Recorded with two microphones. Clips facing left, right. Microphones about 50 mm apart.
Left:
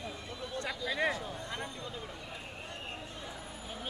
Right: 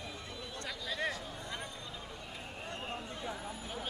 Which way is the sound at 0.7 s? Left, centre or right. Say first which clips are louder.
Left 4 dB; centre.